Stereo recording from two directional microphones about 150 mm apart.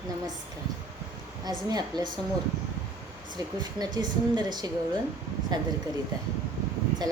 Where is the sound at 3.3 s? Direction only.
25° right (ahead or behind).